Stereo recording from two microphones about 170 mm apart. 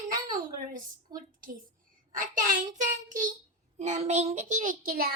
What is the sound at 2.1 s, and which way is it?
A woman's voice, 50° right (ahead or behind).